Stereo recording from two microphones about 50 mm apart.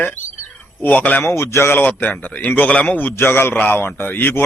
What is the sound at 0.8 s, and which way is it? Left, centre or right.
Speech, left.